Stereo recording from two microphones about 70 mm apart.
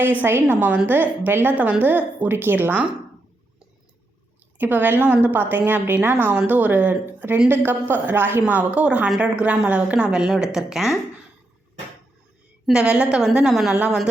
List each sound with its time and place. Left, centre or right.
0.0 s a woman's voice: right
4.5 s a woman's voice: right
9.0 s a woman's voice: centre
9.4 s a woman's voice: centre
12.7 s a woman's voice: centre